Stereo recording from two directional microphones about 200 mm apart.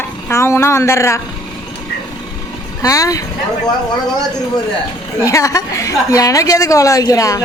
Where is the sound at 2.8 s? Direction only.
15° left (ahead or behind).